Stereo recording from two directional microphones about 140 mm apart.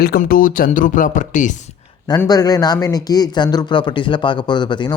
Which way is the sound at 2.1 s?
25° left (ahead or behind).